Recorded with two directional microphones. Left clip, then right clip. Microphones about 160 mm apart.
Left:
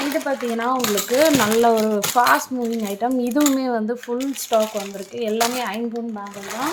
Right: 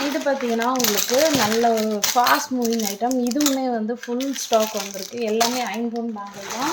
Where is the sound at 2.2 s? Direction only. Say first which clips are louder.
Left 1 dB; 20° left (ahead or behind).